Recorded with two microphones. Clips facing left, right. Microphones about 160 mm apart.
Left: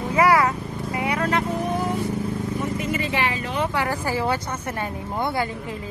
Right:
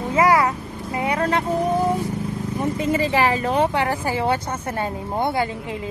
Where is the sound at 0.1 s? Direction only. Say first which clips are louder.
Right 1 dB; 20° right (ahead or behind).